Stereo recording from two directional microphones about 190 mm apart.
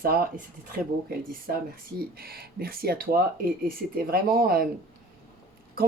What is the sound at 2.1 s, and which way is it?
Speech, 55° right (ahead or behind).